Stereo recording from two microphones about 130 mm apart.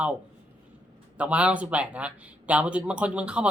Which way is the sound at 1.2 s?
10° right (ahead or behind).